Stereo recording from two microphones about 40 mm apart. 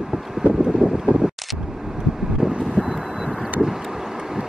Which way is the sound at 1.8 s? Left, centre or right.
Centre.